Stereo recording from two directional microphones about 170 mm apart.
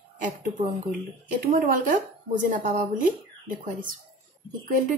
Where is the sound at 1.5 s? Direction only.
55° right (ahead or behind).